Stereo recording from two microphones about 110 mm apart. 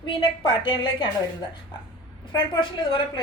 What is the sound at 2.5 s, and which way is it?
Speech, 50° left (ahead or behind).